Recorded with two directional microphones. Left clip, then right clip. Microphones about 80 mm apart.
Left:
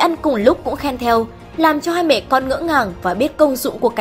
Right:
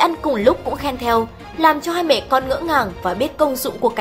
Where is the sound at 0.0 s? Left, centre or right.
Left.